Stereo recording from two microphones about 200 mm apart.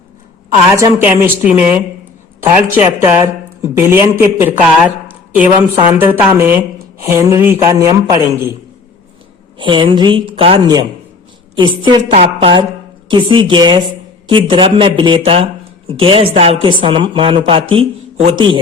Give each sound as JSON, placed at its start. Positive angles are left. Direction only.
{"t": 0.8, "sound": "speech", "side_deg": -10}
{"t": 5.8, "sound": "speech", "side_deg": -10}
{"t": 9.6, "sound": "speech", "side_deg": -25}